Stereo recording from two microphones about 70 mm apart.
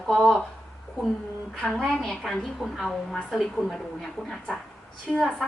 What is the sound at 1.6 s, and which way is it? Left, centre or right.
A woman's voice, centre.